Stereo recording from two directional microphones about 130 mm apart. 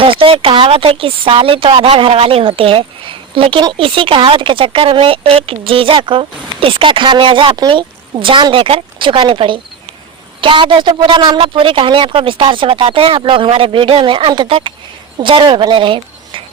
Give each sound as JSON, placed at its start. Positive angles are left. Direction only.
{"t": 0.0, "sound": "a woman's voice", "side_deg": -45}